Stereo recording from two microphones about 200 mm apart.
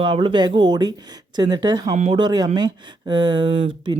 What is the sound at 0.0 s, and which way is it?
Speech, 25° right (ahead or behind).